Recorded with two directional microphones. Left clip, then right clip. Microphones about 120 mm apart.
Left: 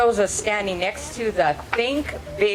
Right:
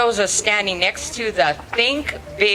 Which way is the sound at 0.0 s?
20° right (ahead or behind).